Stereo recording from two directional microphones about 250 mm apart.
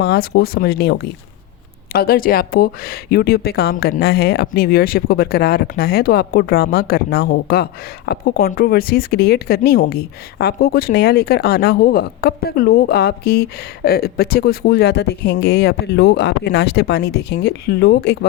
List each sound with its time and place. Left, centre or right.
0.0 s speech: left